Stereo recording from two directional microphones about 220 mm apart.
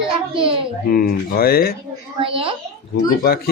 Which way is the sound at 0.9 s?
45° left (ahead or behind).